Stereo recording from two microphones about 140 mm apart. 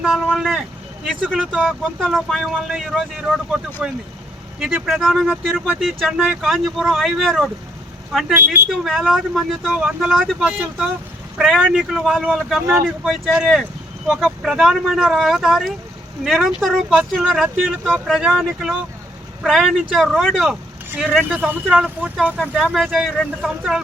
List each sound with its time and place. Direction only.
0.0 s speech: 5° right (ahead or behind)
8.3 s speech: 15° right (ahead or behind)
8.8 s speech: centre (ahead or behind)
21.2 s speech: 10° right (ahead or behind)